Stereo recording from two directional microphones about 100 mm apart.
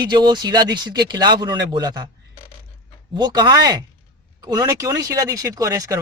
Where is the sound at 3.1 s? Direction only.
45° right (ahead or behind).